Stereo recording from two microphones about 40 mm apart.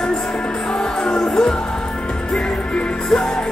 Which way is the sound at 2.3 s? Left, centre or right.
Left.